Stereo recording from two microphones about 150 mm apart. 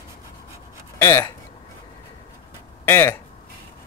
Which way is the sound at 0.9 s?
15° left (ahead or behind).